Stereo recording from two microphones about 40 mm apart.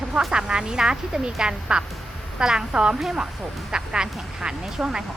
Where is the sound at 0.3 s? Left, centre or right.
Centre.